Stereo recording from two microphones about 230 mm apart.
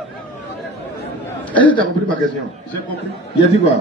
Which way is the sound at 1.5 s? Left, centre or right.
Centre.